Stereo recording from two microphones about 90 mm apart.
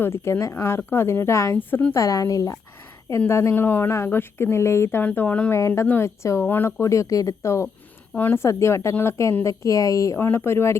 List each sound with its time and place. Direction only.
0.0 s a woman's voice: 30° left (ahead or behind)
5.0 s speech: 15° left (ahead or behind)
5.5 s a woman's voice: 35° left (ahead or behind)
8.1 s a woman's voice: 20° left (ahead or behind)
8.4 s a woman's voice: 30° left (ahead or behind)